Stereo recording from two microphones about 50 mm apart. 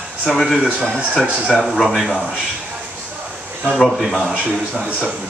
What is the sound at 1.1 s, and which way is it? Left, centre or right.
Speech, right.